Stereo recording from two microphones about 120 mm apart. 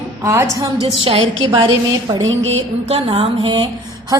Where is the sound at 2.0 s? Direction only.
35° right (ahead or behind).